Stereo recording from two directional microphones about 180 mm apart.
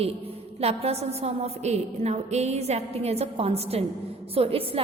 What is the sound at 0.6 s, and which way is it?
A woman's voice, 35° right (ahead or behind).